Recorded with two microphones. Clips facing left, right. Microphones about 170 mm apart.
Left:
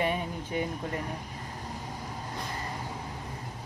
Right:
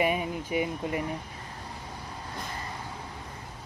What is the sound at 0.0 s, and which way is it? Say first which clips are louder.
Speech: right 3 dB; 10° right (ahead or behind).